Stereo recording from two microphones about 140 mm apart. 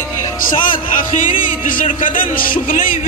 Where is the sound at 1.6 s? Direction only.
70° left (ahead or behind).